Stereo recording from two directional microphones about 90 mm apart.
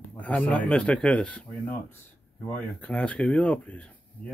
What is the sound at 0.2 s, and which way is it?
Speech, 15° left (ahead or behind).